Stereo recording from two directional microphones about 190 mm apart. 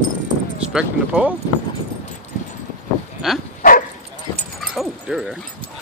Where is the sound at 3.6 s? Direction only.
45° left (ahead or behind).